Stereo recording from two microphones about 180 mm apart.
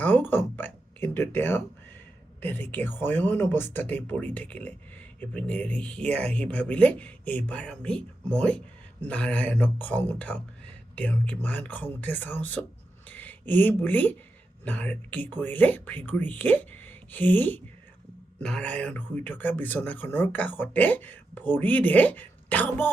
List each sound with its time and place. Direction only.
0.0 s speech: 10° left (ahead or behind)